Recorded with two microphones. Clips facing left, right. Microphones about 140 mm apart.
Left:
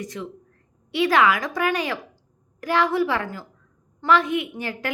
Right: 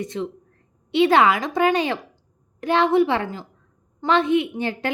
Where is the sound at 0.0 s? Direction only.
25° right (ahead or behind).